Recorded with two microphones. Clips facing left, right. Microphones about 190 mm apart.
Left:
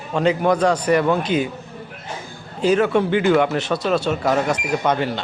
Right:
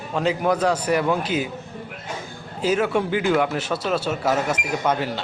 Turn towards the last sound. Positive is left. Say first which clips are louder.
# left 3 dB
turn(degrees=-5)  # may be behind; listen again after turning